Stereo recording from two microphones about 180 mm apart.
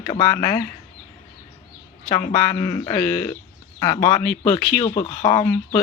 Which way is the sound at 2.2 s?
15° left (ahead or behind).